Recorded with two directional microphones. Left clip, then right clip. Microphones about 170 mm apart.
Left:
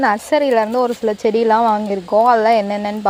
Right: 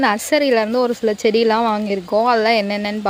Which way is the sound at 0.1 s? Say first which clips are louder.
Left 1 dB; 15° right (ahead or behind).